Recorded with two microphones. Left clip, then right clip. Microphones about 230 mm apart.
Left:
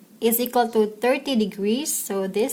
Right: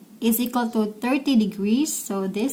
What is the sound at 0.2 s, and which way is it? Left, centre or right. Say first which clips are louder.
A woman's voice: left 4 dB; left.